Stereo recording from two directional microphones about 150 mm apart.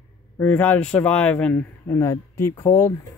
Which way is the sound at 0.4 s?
10° left (ahead or behind).